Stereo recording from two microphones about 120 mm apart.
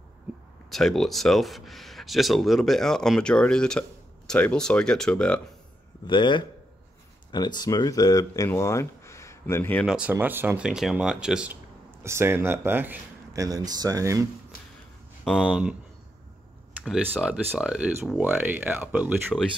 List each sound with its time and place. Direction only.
0.7 s speech: centre (ahead or behind)
6.0 s speech: 40° left (ahead or behind); by 9.8 s 15° left (ahead or behind)
9.8 s speech: 10° right (ahead or behind)
12.0 s speech: 20° right (ahead or behind)
13.3 s speech: 30° right (ahead or behind)
15.2 s speech: 5° right (ahead or behind)
16.8 s speech: centre (ahead or behind)